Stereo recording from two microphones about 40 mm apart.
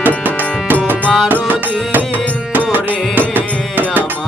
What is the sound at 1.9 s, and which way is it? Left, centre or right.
Music, right.